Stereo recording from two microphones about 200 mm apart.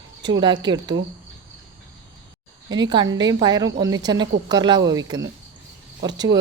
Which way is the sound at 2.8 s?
20° right (ahead or behind).